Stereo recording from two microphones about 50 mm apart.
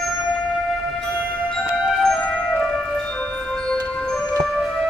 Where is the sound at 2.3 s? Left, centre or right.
Centre.